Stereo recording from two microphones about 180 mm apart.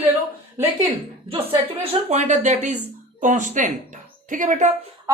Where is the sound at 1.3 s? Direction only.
30° right (ahead or behind).